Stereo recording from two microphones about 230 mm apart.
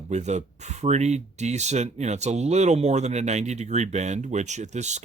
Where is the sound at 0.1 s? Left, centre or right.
Right.